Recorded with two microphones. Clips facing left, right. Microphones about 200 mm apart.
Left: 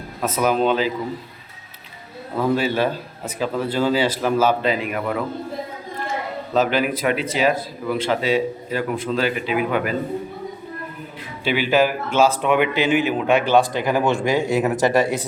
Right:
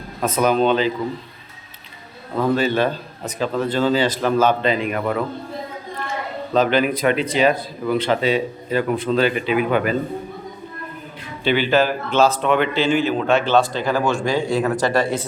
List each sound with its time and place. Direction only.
0.2 s speech: 5° left (ahead or behind)
2.4 s speech: 10° left (ahead or behind)
6.5 s speech: 5° left (ahead or behind)
11.4 s speech: 10° left (ahead or behind)